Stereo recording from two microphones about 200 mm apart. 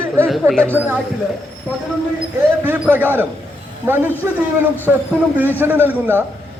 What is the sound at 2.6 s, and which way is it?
Speech, 10° right (ahead or behind).